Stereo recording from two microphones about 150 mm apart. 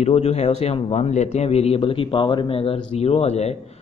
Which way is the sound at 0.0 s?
45° left (ahead or behind).